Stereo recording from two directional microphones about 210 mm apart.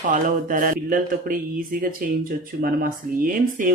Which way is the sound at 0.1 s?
40° right (ahead or behind).